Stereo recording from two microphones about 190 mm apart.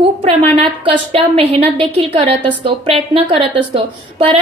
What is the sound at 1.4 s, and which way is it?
A woman's voice, 30° right (ahead or behind).